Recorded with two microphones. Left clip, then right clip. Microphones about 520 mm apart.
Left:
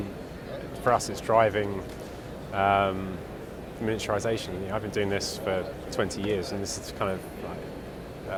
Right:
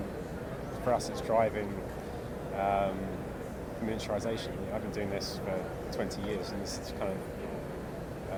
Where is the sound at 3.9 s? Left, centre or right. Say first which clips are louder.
Left 6 dB; left.